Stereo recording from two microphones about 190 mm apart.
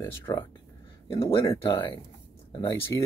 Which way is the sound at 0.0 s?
15° left (ahead or behind).